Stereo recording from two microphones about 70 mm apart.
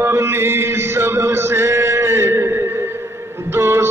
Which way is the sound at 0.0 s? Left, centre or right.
Right.